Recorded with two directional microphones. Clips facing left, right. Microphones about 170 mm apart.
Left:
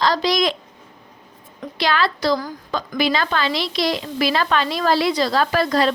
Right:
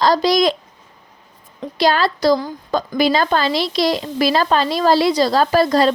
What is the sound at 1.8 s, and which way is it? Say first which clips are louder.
Speech: right 4 dB; 40° right (ahead or behind).